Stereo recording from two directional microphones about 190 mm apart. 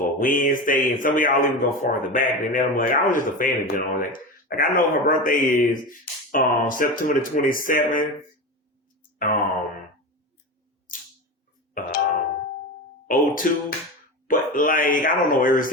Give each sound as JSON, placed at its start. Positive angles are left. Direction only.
{"t": 0.0, "sound": "mantra", "side_deg": 45}
{"t": 0.9, "sound": "a man's voice", "side_deg": 45}
{"t": 11.7, "sound": "music", "side_deg": 45}
{"t": 13.1, "sound": "a man's voice", "side_deg": 45}